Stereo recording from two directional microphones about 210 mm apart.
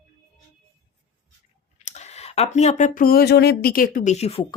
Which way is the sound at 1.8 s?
30° left (ahead or behind).